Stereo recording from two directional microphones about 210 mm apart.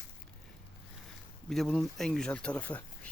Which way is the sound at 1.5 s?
Centre (ahead or behind).